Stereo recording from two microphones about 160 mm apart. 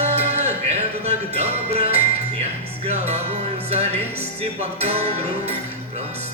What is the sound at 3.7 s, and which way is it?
Music, 40° right (ahead or behind).